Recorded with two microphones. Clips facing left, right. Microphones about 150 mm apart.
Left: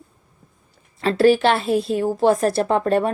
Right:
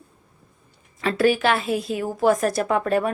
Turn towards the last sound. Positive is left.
turn(degrees=35)  # may be behind; listen again after turning